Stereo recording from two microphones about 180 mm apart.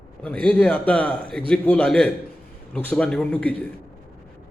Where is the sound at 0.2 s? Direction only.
5° left (ahead or behind).